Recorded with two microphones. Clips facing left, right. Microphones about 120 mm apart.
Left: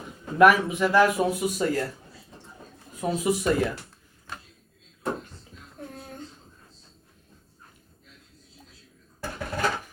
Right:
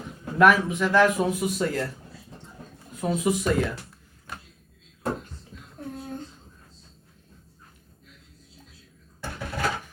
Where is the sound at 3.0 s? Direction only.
Centre (ahead or behind).